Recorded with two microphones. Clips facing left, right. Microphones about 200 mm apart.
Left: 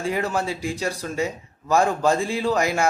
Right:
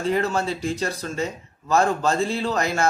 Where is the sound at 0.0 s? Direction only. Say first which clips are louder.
Right 2 dB; 10° left (ahead or behind).